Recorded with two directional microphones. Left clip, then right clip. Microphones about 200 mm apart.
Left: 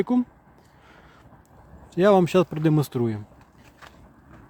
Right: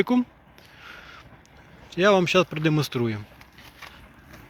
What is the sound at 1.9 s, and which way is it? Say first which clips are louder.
Speech: left 1 dB; 35° left (ahead or behind).